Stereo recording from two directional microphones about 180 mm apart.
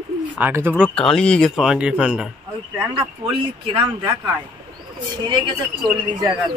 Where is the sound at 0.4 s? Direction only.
10° right (ahead or behind).